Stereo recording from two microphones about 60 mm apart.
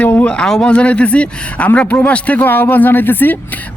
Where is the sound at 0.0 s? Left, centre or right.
Left.